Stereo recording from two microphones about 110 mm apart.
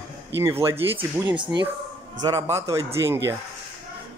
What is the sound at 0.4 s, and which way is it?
Speech, 25° right (ahead or behind).